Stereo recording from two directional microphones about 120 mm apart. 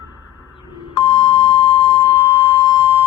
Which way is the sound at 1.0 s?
50° left (ahead or behind).